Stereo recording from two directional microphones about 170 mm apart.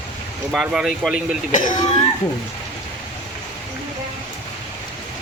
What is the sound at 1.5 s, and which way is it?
Speech, 50° left (ahead or behind).